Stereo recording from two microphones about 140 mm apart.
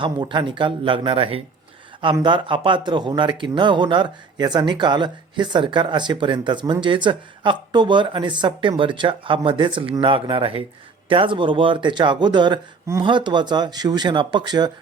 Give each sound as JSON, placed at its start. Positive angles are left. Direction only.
{"t": 0.0, "sound": "speech", "side_deg": -35}